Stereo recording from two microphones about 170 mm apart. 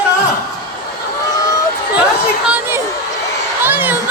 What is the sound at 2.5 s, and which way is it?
Speech, 15° right (ahead or behind).